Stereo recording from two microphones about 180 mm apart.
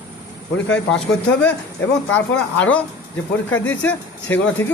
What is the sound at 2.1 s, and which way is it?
Speech, 10° left (ahead or behind).